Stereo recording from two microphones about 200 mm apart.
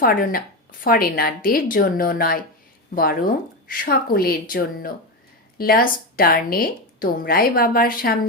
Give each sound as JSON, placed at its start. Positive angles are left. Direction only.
{"t": 0.0, "sound": "a woman's voice", "side_deg": 45}